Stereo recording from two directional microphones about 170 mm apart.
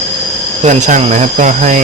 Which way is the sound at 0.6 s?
45° right (ahead or behind).